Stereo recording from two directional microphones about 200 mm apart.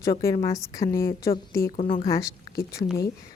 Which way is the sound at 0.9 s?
45° left (ahead or behind).